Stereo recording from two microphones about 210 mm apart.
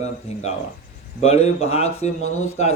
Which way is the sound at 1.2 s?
30° left (ahead or behind).